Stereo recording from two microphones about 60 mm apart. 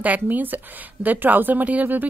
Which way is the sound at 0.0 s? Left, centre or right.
Right.